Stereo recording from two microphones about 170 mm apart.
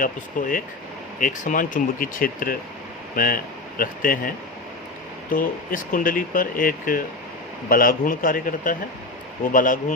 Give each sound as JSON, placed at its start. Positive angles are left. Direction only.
{"t": 0.0, "sound": "speech", "side_deg": 50}
{"t": 5.3, "sound": "speech", "side_deg": 55}